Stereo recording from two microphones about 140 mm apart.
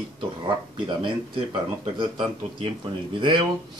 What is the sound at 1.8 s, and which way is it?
A man's voice, 40° right (ahead or behind).